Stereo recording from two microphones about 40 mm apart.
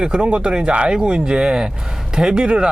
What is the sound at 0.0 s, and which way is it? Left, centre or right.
Speech, right.